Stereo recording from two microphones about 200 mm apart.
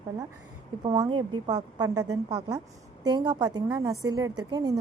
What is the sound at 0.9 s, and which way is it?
A woman's voice, 20° right (ahead or behind).